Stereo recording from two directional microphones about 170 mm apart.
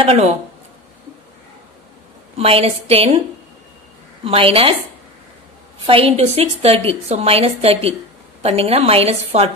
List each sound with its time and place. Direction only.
0.0 s a woman's voice: 40° right (ahead or behind)
2.3 s a woman's voice: 35° right (ahead or behind)
4.2 s a woman's voice: 35° right (ahead or behind)
5.8 s a woman's voice: 30° right (ahead or behind)